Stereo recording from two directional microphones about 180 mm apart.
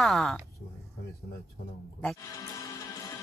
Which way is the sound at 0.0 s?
Centre (ahead or behind).